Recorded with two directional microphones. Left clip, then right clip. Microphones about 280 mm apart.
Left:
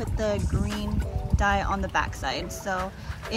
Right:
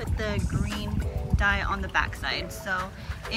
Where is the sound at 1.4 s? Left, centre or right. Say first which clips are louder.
Left 1 dB; centre.